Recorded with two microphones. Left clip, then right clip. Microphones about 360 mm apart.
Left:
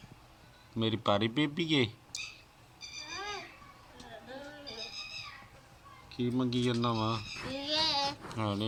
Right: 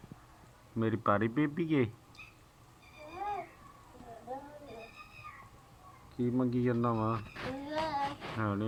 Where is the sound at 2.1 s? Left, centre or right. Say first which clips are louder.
Left 11 dB; left.